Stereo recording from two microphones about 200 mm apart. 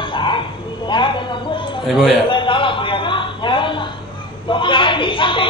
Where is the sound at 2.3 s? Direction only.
25° left (ahead or behind).